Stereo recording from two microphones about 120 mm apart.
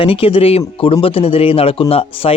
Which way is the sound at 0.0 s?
50° left (ahead or behind).